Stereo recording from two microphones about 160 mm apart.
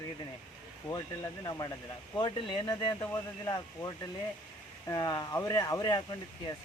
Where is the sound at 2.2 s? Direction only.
30° left (ahead or behind).